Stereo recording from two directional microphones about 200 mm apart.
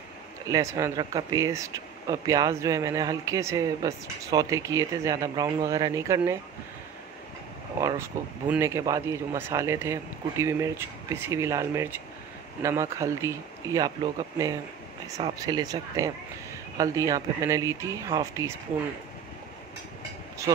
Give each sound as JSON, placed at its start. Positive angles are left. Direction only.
{"t": 0.5, "sound": "speech", "side_deg": -15}
{"t": 8.5, "sound": "speech", "side_deg": -15}
{"t": 20.5, "sound": "speech", "side_deg": -20}